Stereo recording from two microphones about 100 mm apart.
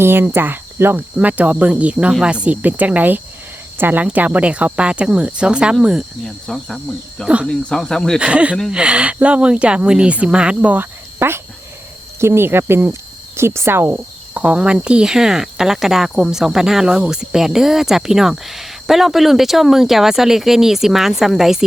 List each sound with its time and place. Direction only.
0.0 s cricket: 25° right (ahead or behind)
1.1 s speech: 15° right (ahead or behind)
6.2 s speech: 5° left (ahead or behind)
8.2 s speech: 10° right (ahead or behind)
14.4 s speech: 10° right (ahead or behind)